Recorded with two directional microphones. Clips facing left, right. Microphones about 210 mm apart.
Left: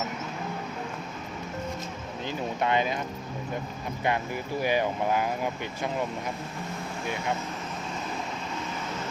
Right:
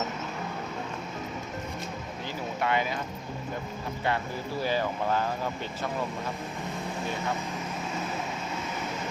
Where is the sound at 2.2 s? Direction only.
20° left (ahead or behind).